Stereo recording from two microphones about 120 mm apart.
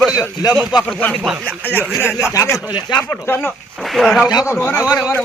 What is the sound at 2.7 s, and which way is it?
Speech, 35° left (ahead or behind).